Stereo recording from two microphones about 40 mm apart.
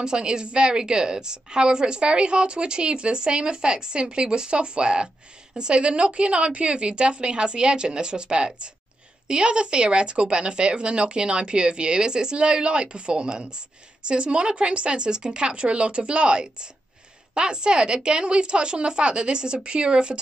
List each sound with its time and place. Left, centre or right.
0.0 s a woman's voice: centre